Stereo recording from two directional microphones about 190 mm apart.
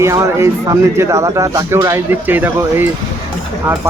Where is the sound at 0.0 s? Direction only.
15° right (ahead or behind).